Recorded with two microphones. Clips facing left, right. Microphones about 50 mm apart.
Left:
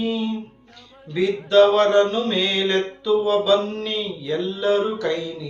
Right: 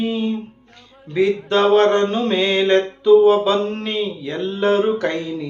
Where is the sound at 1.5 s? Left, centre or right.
Right.